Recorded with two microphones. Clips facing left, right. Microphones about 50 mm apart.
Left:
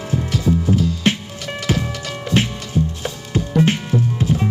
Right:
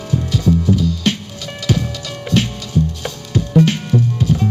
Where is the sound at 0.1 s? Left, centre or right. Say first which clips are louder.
Right 3 dB; left.